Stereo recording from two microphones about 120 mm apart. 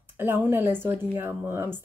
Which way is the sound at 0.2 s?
15° right (ahead or behind).